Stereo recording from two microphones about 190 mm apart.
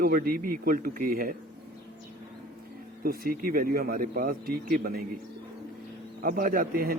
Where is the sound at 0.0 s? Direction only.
50° right (ahead or behind).